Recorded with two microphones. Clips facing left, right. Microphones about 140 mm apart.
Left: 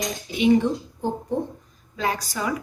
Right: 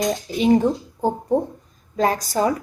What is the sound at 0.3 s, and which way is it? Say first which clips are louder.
Speech: right 1 dB; 40° right (ahead or behind).